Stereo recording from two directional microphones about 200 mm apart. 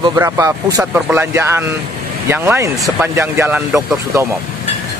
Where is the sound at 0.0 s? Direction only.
15° right (ahead or behind).